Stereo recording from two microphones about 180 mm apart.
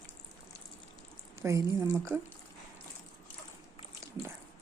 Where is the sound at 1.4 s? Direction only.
15° right (ahead or behind).